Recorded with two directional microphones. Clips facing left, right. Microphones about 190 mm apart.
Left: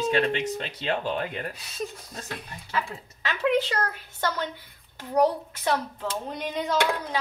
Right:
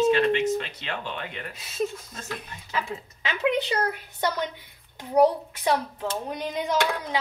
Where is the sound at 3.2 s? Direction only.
20° right (ahead or behind).